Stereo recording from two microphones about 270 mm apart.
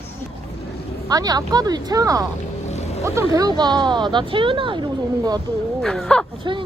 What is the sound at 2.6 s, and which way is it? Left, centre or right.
Music, left.